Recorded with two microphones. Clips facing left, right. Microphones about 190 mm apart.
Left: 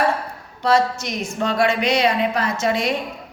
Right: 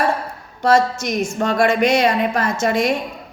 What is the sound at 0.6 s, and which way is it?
A woman's voice, 45° right (ahead or behind).